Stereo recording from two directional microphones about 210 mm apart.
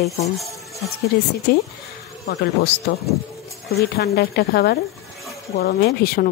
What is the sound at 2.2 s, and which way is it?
Speech, 55° left (ahead or behind).